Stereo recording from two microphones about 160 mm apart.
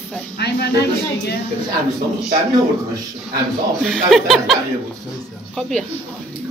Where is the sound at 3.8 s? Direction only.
Centre (ahead or behind).